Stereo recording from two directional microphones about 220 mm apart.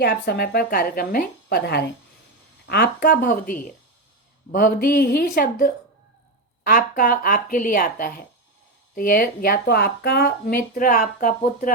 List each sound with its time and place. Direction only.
0.0 s a woman's voice: 45° left (ahead or behind)